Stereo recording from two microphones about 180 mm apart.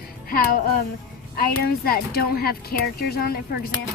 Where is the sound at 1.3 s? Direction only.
55° left (ahead or behind).